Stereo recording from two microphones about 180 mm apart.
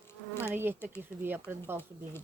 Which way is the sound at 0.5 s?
10° right (ahead or behind).